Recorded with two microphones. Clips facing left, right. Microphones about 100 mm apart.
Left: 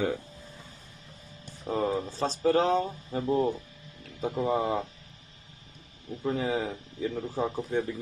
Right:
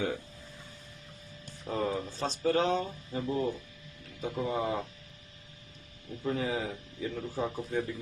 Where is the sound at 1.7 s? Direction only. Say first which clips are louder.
Left 4 dB; 30° left (ahead or behind).